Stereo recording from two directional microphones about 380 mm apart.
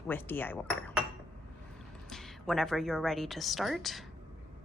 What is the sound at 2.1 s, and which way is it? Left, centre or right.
A woman's voice, centre.